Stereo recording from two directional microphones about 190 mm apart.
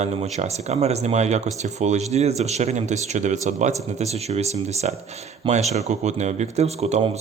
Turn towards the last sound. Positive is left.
turn(degrees=-35)  # may be behind; listen again after turning